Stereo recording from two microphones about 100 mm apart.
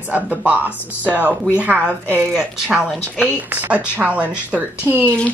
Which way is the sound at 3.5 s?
15° right (ahead or behind).